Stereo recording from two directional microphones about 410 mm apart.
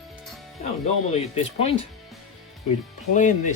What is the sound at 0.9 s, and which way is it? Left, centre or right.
Speech, centre.